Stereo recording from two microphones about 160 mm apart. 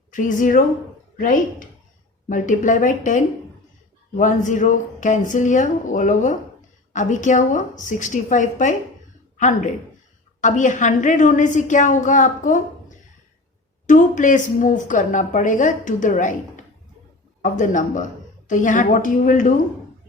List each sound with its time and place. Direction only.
0.1 s a woman's voice: 55° left (ahead or behind)
13.8 s a woman's voice: 50° left (ahead or behind)
17.4 s a woman's voice: 55° left (ahead or behind)